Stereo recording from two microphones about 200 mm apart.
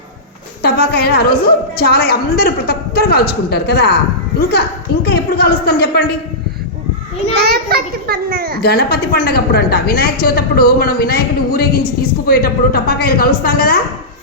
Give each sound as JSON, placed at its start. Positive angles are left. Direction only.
{"t": 0.6, "sound": "a woman's voice", "side_deg": 55}
{"t": 5.0, "sound": "a woman's voice", "side_deg": 55}
{"t": 7.3, "sound": "a child's voice", "side_deg": -50}
{"t": 8.6, "sound": "a woman's voice", "side_deg": 50}